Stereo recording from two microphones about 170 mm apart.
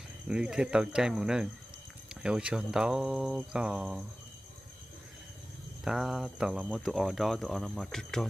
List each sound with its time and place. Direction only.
0.3 s speech: 5° right (ahead or behind)
5.9 s speech: centre (ahead or behind)